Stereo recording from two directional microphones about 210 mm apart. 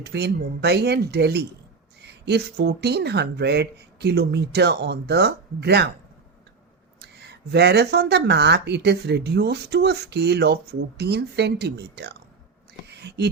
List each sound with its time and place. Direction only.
0.0 s speech: 55° right (ahead or behind)
7.0 s speech: 55° right (ahead or behind)
12.9 s a sound: 55° right (ahead or behind)